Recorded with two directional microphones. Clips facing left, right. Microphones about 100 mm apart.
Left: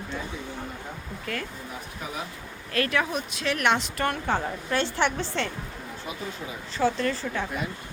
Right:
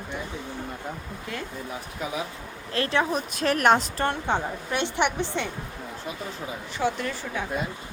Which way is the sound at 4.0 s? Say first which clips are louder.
Right 1 dB; 20° right (ahead or behind).